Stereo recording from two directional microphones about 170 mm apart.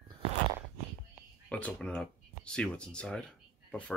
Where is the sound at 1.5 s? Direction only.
10° left (ahead or behind).